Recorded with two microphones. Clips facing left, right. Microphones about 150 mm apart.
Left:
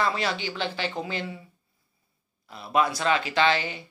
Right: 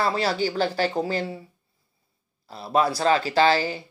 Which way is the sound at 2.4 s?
30° right (ahead or behind).